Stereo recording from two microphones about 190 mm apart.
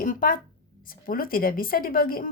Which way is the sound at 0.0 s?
45° left (ahead or behind).